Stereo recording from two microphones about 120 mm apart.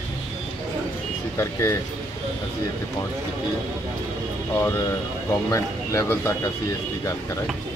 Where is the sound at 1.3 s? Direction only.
25° left (ahead or behind).